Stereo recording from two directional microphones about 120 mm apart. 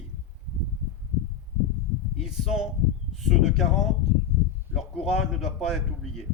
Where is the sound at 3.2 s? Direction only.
Centre (ahead or behind).